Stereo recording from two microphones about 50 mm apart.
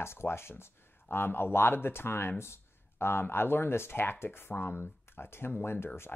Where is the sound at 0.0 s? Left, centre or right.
Left.